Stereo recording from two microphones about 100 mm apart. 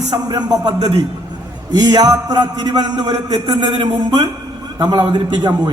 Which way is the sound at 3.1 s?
55° right (ahead or behind).